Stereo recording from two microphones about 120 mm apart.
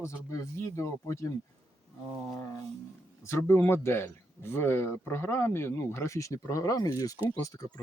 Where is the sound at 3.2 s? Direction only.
20° left (ahead or behind).